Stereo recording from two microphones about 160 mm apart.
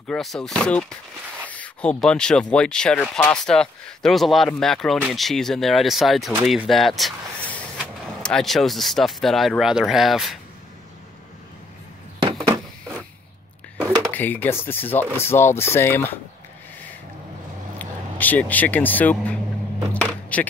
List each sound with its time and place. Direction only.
0.1 s speech: 5° left (ahead or behind)
8.2 s speech: 5° left (ahead or behind)
14.1 s speech: 10° left (ahead or behind)
17.7 s speech: 10° left (ahead or behind)
19.9 s a sound: 10° left (ahead or behind)